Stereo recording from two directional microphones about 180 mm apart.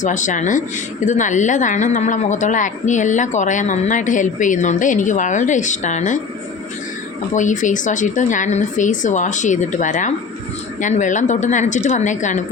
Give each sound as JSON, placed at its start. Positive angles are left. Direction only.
{"t": 0.0, "sound": "a woman's voice", "side_deg": 45}
{"t": 7.3, "sound": "a woman's voice", "side_deg": 45}